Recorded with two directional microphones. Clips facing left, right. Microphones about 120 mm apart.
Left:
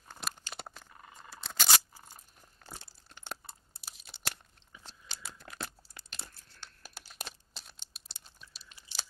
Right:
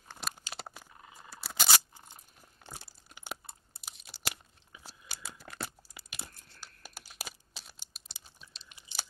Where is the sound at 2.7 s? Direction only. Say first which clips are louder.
Even; 10° right (ahead or behind).